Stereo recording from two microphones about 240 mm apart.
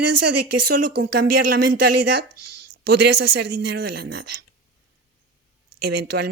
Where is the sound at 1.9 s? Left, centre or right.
Right.